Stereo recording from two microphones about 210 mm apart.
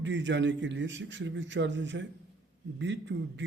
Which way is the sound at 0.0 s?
60° right (ahead or behind).